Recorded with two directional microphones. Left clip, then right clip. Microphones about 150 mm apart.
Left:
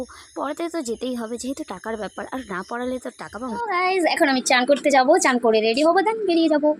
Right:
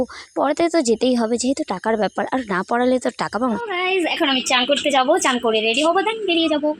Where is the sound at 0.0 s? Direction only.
40° right (ahead or behind); by 3.6 s 55° right (ahead or behind).